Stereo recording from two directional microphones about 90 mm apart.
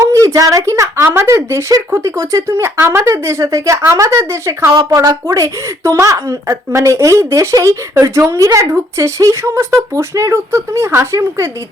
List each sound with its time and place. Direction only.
0.0 s speech: 30° right (ahead or behind)